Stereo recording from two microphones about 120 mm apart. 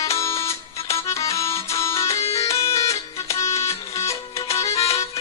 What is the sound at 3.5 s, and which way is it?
Music, 60° left (ahead or behind).